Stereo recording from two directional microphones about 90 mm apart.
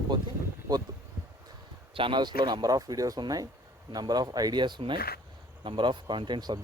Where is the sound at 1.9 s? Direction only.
70° right (ahead or behind).